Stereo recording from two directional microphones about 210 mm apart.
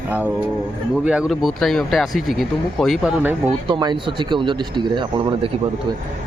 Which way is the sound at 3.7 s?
20° right (ahead or behind).